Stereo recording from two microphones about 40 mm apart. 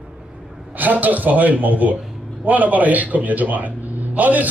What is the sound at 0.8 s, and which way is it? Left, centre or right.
A man's voice, right.